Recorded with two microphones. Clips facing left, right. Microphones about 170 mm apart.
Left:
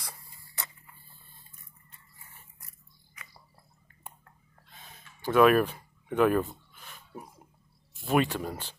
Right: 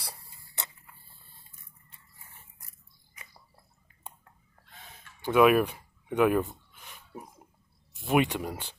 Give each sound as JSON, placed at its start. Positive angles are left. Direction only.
{"t": 0.0, "sound": "a sound", "side_deg": -30}
{"t": 5.2, "sound": "speech", "side_deg": -10}
{"t": 8.0, "sound": "speech", "side_deg": -15}